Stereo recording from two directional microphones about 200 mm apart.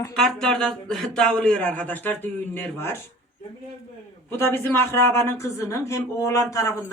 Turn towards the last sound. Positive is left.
turn(degrees=15)  # may be behind; listen again after turning